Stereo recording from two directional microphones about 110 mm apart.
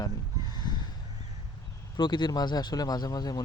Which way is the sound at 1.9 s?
45° left (ahead or behind).